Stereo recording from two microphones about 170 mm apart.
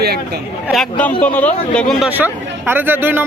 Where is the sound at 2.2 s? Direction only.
10° right (ahead or behind).